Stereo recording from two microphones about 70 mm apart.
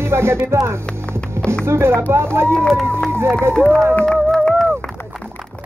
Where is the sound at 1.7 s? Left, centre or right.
Right.